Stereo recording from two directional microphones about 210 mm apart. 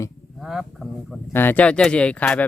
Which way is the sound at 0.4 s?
Centre (ahead or behind).